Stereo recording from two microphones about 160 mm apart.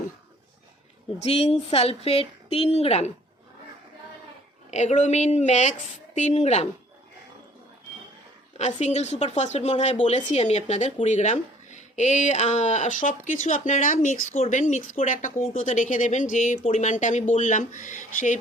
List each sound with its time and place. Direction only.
1.2 s a woman's voice: 40° left (ahead or behind)
4.7 s speech: 45° left (ahead or behind)
8.5 s speech: 45° left (ahead or behind)